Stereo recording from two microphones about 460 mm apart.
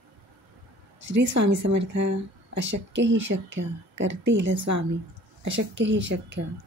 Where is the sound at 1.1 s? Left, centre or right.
Right.